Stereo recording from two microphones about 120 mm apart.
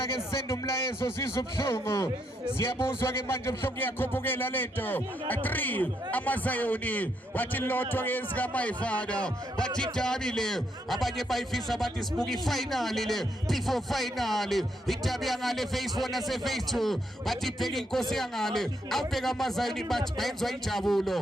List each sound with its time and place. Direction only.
0.4 s a man's voice: 25° left (ahead or behind); by 21.2 s centre (ahead or behind)